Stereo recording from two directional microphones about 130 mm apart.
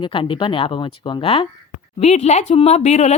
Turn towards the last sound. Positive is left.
turn(degrees=55)  # may be behind; listen again after turning